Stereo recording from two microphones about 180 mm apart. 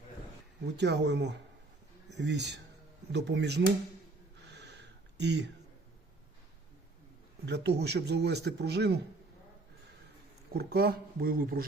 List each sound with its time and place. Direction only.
0.6 s speech: 70° right (ahead or behind)
4.5 s a sound: 70° right (ahead or behind)
7.4 s speech: 70° right (ahead or behind)
10.5 s speech: 60° right (ahead or behind)